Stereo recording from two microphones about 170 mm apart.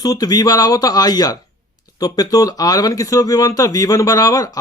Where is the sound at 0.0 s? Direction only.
20° left (ahead or behind).